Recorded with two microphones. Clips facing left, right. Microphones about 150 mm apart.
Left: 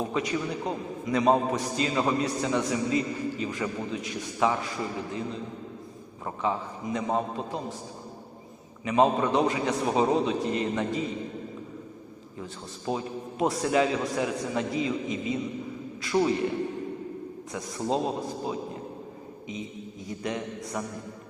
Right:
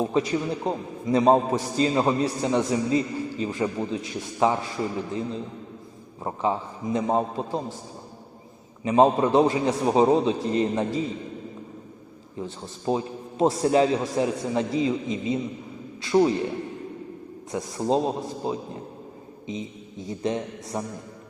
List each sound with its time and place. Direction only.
0.0 s a man's voice: 30° right (ahead or behind)
6.2 s a man's voice: 30° right (ahead or behind)
8.8 s a man's voice: 30° right (ahead or behind)
12.4 s a man's voice: 30° right (ahead or behind)
17.5 s a man's voice: 30° right (ahead or behind)